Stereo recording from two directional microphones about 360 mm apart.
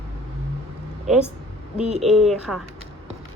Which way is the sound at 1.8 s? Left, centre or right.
Centre.